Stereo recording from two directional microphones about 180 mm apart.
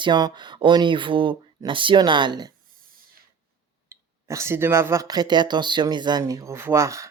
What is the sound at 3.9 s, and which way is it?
Speech, 15° right (ahead or behind).